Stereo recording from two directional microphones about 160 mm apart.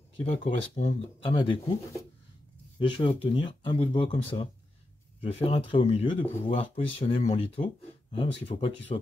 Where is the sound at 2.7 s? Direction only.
30° left (ahead or behind).